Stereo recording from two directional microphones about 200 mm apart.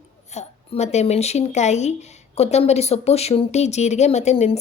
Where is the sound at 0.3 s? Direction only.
35° left (ahead or behind).